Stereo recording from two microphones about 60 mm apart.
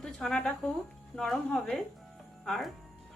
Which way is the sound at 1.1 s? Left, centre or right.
Centre.